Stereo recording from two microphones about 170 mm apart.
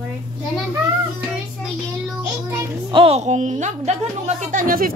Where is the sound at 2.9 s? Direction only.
30° right (ahead or behind); by 4.9 s 55° right (ahead or behind).